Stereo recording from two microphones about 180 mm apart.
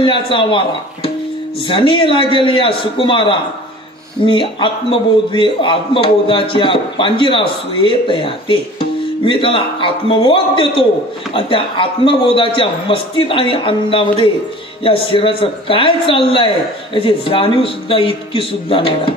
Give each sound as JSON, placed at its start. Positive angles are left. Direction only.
{"t": 0.0, "sound": "a man's voice", "side_deg": 30}
{"t": 1.7, "sound": "a man's voice", "side_deg": 30}